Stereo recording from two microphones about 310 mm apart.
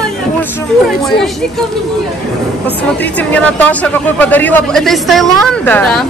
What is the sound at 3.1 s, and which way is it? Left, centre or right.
A man's voice, centre.